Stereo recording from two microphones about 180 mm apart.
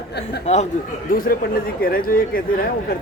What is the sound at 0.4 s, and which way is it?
Speech, 40° left (ahead or behind).